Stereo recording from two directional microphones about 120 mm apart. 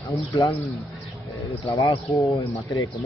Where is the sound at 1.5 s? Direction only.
25° left (ahead or behind).